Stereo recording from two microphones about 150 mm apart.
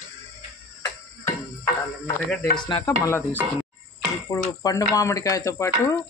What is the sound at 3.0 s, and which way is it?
Speech, 15° left (ahead or behind).